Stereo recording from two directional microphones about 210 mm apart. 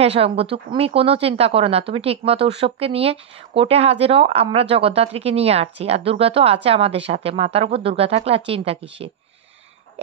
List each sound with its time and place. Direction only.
0.0 s speech: 30° right (ahead or behind)